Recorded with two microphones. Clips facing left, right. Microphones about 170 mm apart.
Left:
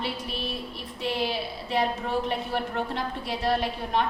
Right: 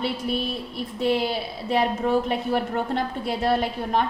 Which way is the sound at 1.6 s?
45° right (ahead or behind).